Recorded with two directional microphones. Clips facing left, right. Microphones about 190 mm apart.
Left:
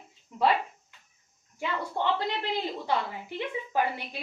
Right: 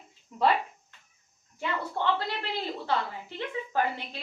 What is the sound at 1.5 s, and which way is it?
A woman's voice, 15° left (ahead or behind).